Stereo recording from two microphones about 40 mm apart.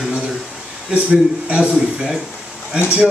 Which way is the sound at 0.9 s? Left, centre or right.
Right.